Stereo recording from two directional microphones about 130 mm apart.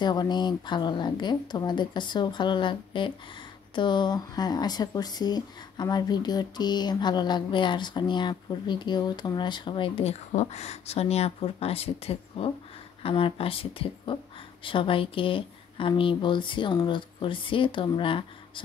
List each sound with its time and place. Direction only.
0.0 s a woman's voice: 35° left (ahead or behind)